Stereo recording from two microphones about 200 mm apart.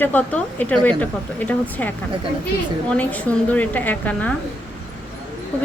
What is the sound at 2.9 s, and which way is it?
A woman's voice, 5° left (ahead or behind).